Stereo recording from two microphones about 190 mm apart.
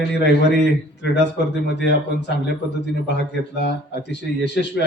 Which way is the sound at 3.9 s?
65° left (ahead or behind).